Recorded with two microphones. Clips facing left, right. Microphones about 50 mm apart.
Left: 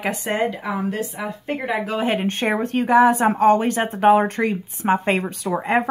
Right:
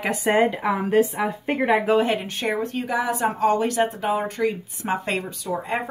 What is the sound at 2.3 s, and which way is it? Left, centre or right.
Speech, left.